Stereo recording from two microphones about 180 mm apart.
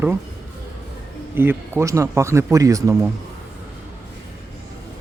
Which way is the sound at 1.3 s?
10° right (ahead or behind).